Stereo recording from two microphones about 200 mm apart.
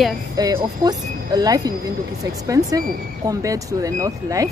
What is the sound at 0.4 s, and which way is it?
Speech, 15° right (ahead or behind).